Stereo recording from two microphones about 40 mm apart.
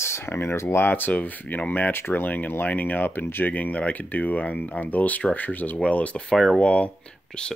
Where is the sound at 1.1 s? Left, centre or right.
Left.